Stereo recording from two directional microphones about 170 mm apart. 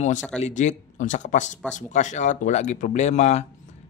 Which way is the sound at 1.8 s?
45° left (ahead or behind).